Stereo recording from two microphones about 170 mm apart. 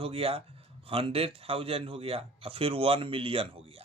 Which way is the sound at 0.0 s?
35° right (ahead or behind).